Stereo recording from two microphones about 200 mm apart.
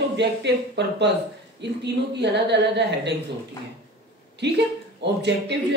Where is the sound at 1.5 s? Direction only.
60° right (ahead or behind).